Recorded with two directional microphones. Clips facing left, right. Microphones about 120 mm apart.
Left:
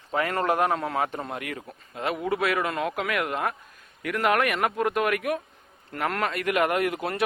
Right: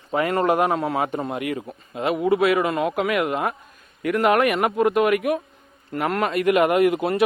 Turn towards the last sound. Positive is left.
turn(degrees=-15)  # may be behind; listen again after turning